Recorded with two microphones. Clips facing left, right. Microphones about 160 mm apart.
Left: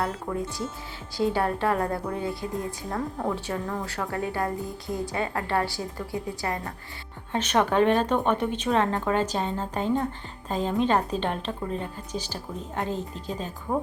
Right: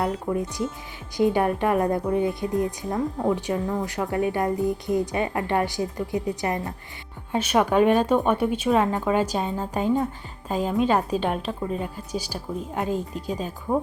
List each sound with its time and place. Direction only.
0.0 s a woman's voice: 20° right (ahead or behind)
7.3 s a woman's voice: 10° right (ahead or behind)